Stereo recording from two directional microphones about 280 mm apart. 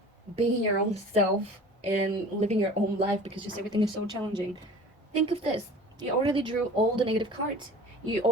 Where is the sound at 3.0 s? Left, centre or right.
Centre.